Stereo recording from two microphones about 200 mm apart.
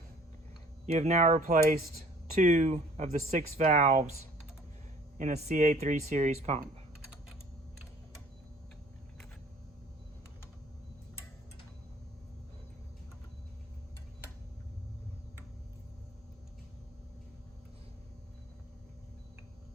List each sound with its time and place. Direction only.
0.9 s speech: 35° right (ahead or behind)